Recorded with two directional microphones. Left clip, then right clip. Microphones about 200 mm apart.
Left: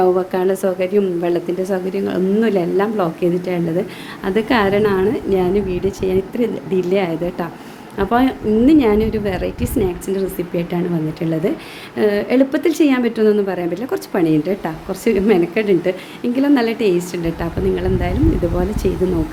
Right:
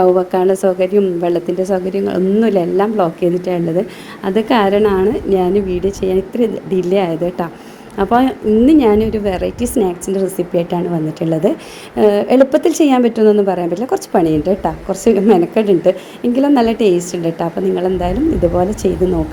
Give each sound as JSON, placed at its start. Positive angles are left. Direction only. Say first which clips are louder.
{"t": 0.0, "sound": "a woman's voice", "louder": "right 4 dB", "side_deg": -15}
{"t": 11.9, "sound": "a woman's voice", "louder": "right 5 dB", "side_deg": -15}